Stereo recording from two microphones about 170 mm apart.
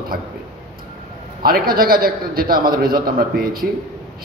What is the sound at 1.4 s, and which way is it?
A man's voice, 60° right (ahead or behind).